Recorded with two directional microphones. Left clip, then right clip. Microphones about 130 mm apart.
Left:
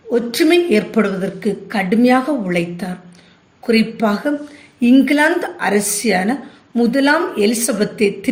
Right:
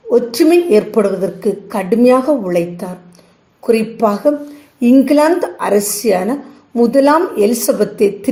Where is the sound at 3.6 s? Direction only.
45° right (ahead or behind).